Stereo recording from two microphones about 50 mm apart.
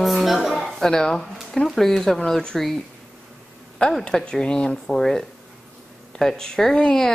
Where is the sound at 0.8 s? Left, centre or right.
Centre.